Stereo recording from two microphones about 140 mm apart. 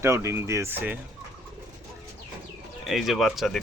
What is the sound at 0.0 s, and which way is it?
Speech, 20° right (ahead or behind).